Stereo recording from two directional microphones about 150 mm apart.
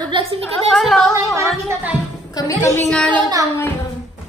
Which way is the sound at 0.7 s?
Centre (ahead or behind).